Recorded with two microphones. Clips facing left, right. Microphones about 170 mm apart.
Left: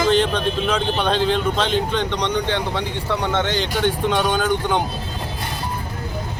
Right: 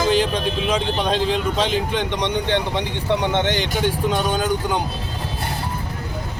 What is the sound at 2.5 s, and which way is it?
Speech, 20° right (ahead or behind).